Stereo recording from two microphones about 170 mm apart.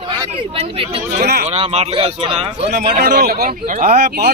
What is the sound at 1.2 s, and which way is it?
Speech, 70° right (ahead or behind).